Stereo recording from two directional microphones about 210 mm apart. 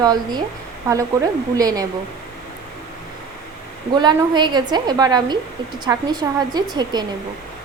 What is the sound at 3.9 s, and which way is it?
A woman's voice, 20° right (ahead or behind).